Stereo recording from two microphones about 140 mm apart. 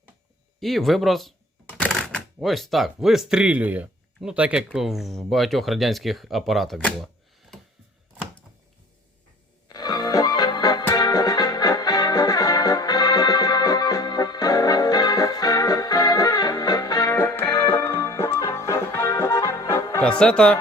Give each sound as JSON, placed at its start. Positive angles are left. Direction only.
{"t": 0.6, "sound": "speech", "side_deg": 0}
{"t": 9.6, "sound": "music", "side_deg": 30}
{"t": 20.0, "sound": "speech", "side_deg": 5}